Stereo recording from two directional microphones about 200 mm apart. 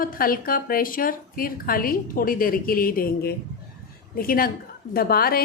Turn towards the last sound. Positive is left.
turn(degrees=50)  # may be behind; listen again after turning